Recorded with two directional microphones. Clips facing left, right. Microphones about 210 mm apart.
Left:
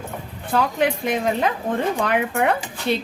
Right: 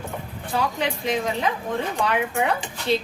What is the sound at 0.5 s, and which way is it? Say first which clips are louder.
Speech: left 5 dB; 55° left (ahead or behind).